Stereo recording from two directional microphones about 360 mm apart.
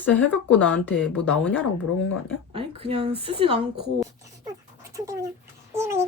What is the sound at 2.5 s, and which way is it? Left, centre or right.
Speech, centre.